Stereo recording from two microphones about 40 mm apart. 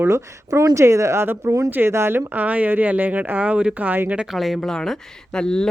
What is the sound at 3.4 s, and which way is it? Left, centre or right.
Speech, right.